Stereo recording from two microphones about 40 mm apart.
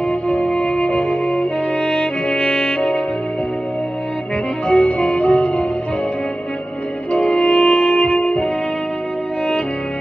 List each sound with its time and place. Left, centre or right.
0.3 s music: left
4.6 s music: left
7.1 s music: left